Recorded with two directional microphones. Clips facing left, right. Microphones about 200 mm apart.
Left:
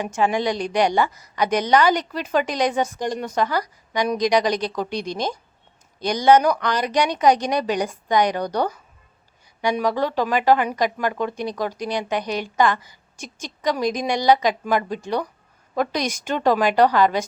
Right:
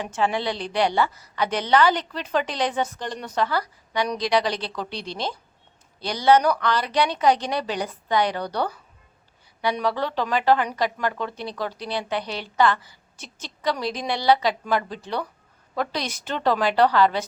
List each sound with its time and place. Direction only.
0.0 s speech: 10° left (ahead or behind)